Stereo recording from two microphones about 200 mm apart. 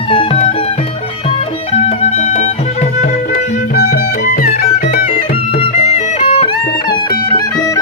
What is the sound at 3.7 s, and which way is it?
Music, 50° left (ahead or behind).